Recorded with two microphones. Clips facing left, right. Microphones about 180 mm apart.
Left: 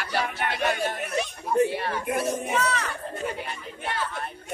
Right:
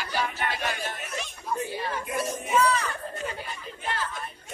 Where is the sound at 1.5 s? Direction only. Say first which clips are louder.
Left 7 dB; 65° left (ahead or behind).